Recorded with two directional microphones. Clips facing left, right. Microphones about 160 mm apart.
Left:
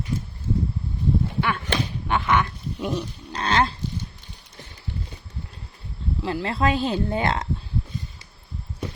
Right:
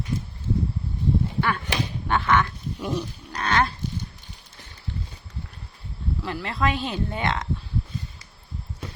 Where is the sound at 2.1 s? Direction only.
10° left (ahead or behind).